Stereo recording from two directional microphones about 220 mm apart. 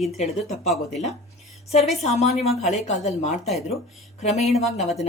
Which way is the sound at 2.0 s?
30° left (ahead or behind).